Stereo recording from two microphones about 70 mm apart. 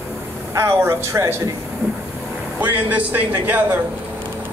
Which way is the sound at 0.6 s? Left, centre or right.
Right.